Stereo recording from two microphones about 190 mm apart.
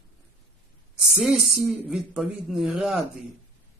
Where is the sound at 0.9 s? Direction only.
5° right (ahead or behind).